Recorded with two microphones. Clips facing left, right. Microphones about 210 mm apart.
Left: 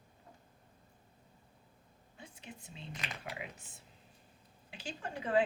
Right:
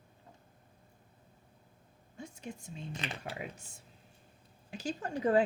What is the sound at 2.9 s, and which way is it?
Speech, 25° right (ahead or behind).